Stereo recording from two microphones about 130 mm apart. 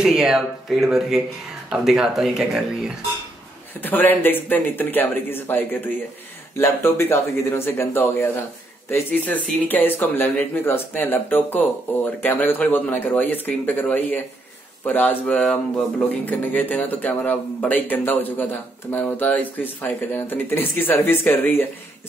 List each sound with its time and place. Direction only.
0.0 s speech: 5° right (ahead or behind)
3.8 s a man's voice: 15° left (ahead or behind)